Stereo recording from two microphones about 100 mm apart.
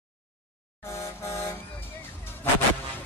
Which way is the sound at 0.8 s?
30° left (ahead or behind).